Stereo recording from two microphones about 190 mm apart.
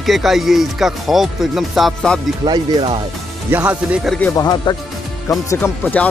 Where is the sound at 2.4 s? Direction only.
25° right (ahead or behind).